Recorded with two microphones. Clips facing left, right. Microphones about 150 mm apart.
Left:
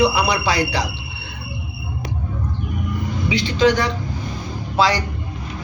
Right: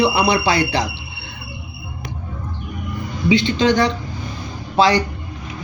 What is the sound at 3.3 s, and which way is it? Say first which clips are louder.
Speech: right 1 dB; 25° right (ahead or behind).